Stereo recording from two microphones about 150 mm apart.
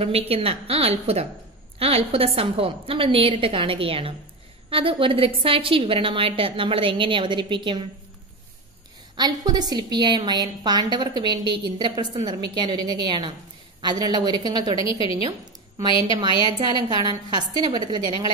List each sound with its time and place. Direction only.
0.0 s a woman's voice: 40° right (ahead or behind)
9.1 s a woman's voice: 30° right (ahead or behind)
14.8 s a woman's voice: 35° left (ahead or behind)
16.3 s a woman's voice: 35° left (ahead or behind)
17.1 s a woman's voice: 35° right (ahead or behind)